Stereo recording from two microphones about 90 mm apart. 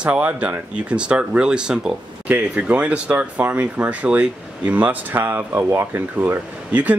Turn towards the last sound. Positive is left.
turn(degrees=-15)  # may be behind; listen again after turning